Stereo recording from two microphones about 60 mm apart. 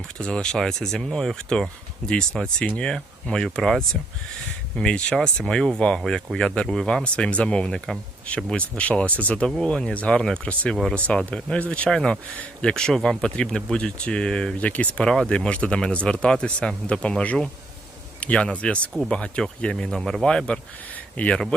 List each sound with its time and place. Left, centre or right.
0.2 s speech: centre
11.9 s speech: centre
12.3 s speech: left
12.7 s speech: centre
14.6 s speech: left